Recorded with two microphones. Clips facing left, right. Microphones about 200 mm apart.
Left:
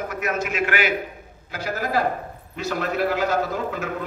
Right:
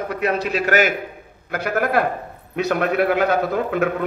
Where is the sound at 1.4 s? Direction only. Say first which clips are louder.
Right 6 dB; 60° right (ahead or behind).